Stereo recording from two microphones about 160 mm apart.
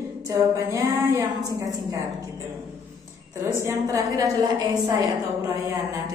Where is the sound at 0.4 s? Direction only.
15° right (ahead or behind).